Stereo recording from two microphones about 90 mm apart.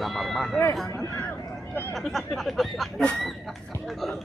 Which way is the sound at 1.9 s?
Centre (ahead or behind).